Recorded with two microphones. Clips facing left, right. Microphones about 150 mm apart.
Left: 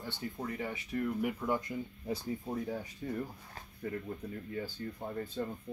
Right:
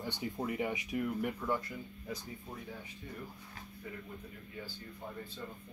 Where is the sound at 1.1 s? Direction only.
5° left (ahead or behind).